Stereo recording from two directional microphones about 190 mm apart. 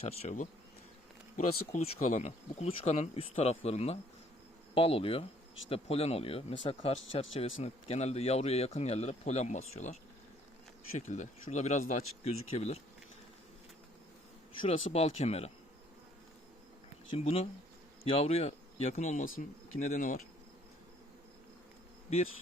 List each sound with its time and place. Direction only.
0.0 s speech: 35° left (ahead or behind)
14.6 s speech: 35° left (ahead or behind)
17.2 s speech: 35° left (ahead or behind)